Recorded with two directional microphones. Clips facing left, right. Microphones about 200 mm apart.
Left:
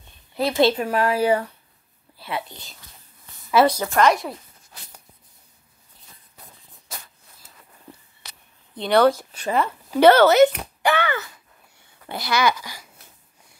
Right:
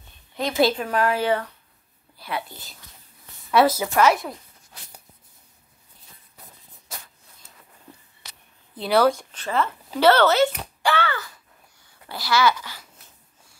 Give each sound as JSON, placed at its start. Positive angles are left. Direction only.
{"t": 0.6, "sound": "a woman's voice", "side_deg": 5}
{"t": 2.1, "sound": "whispering", "side_deg": 0}
{"t": 3.5, "sound": "a woman's voice", "side_deg": -5}
{"t": 8.7, "sound": "a woman's voice", "side_deg": -5}
{"t": 9.4, "sound": "a woman's voice", "side_deg": 15}
{"t": 10.8, "sound": "a sound", "side_deg": 20}
{"t": 12.1, "sound": "a woman's voice", "side_deg": 20}